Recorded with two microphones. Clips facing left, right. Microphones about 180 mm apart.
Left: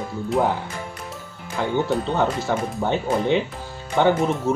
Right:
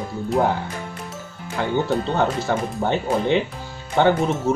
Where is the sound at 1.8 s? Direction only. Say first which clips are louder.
Right 1 dB; 5° left (ahead or behind).